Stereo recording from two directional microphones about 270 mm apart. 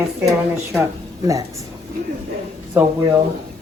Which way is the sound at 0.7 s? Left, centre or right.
Centre.